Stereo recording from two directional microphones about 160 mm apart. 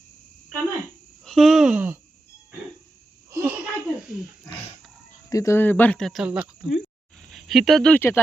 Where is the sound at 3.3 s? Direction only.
15° right (ahead or behind).